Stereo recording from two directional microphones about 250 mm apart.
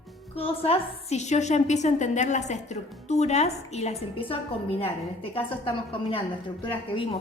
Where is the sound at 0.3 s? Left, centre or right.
Left.